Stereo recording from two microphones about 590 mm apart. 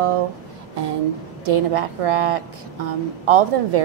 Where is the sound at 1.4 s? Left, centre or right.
Right.